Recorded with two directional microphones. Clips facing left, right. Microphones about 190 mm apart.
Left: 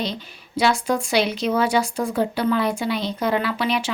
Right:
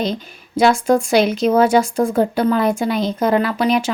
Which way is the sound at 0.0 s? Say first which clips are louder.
Right 6 dB; 45° right (ahead or behind).